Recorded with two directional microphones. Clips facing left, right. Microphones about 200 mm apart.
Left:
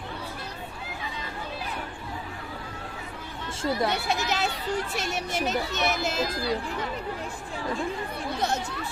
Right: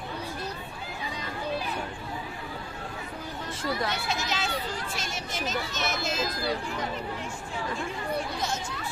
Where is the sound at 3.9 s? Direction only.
60° left (ahead or behind).